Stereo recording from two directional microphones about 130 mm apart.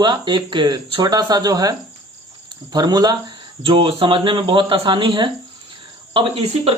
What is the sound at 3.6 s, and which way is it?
Speech, 40° right (ahead or behind).